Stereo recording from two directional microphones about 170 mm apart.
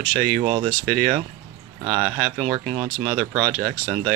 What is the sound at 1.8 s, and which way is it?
Speech, 25° right (ahead or behind).